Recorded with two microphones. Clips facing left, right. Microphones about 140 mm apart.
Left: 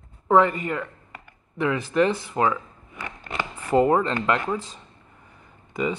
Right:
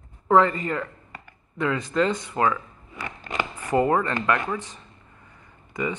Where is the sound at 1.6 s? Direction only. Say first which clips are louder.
Left 2 dB; 20° left (ahead or behind).